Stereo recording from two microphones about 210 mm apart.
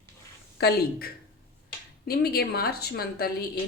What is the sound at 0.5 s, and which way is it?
A woman's voice, 50° left (ahead or behind).